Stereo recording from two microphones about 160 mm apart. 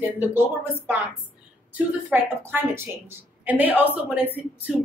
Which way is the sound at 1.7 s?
10° right (ahead or behind).